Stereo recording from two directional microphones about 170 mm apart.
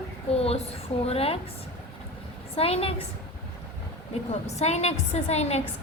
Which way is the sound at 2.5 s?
35° left (ahead or behind).